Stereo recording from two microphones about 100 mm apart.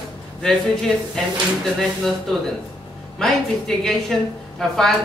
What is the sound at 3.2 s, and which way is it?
A woman's voice, 5° left (ahead or behind).